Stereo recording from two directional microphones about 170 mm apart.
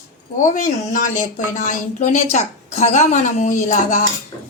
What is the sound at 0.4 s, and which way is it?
Speech, 50° left (ahead or behind).